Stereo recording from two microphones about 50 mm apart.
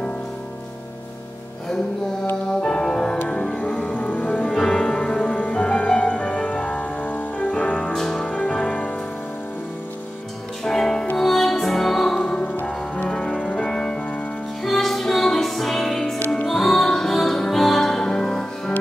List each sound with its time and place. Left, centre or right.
2.6 s music: centre
4.5 s music: centre
5.4 s music: left
7.9 s music: centre
8.2 s music: left
10.6 s music: centre
12.6 s music: left
13.7 s music: centre